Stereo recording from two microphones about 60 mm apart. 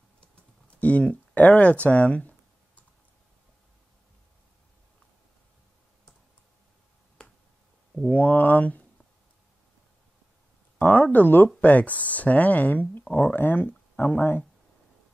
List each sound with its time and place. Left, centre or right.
0.2 s typing: left
8.1 s speech: left
10.8 s speech: left